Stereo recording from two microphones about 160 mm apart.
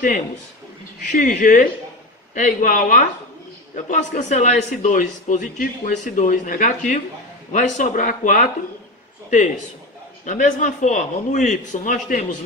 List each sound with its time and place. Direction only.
1.0 s a man's voice: 50° left (ahead or behind)
10.2 s a man's voice: 55° left (ahead or behind)